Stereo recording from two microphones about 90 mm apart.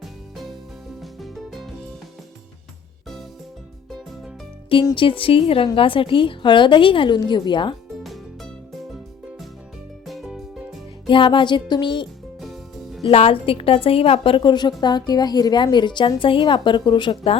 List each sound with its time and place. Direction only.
1.0 s music: centre (ahead or behind)
4.9 s speech: 80° left
5.7 s a woman's voice: 80° left
7.2 s a woman's voice: 55° left (ahead or behind)
8.0 s music: centre (ahead or behind)
10.1 s music: centre (ahead or behind)
11.1 s a woman's voice: 65° left (ahead or behind)
12.4 s music: centre (ahead or behind)
13.1 s a woman's voice: 90° left